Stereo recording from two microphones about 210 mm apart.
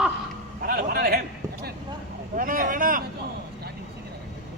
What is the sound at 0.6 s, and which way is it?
Speech, 45° right (ahead or behind).